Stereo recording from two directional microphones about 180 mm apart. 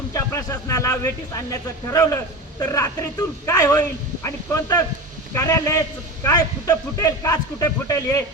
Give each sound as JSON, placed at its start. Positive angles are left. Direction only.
{"t": 0.1, "sound": "a man's voice", "side_deg": 20}